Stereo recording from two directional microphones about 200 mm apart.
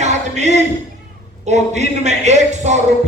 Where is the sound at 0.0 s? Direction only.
35° right (ahead or behind).